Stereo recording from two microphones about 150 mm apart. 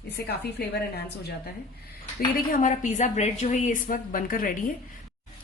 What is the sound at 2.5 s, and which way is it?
A woman's voice, 55° left (ahead or behind).